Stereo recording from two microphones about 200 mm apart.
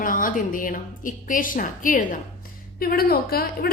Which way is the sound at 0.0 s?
45° left (ahead or behind).